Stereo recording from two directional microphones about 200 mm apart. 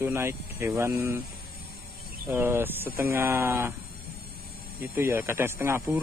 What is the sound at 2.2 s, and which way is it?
Speech, 10° right (ahead or behind).